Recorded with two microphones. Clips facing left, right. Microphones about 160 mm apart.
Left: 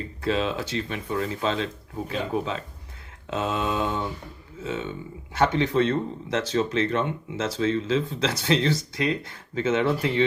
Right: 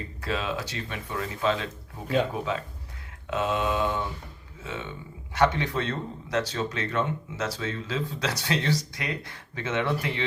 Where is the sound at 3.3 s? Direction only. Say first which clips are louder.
Even; 25° left (ahead or behind).